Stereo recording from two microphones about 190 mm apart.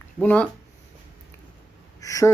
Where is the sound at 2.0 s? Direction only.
15° left (ahead or behind).